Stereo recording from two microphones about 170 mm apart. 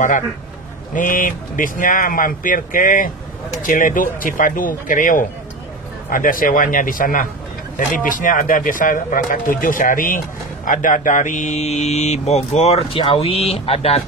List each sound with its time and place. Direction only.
0.9 s speech: 50° left (ahead or behind)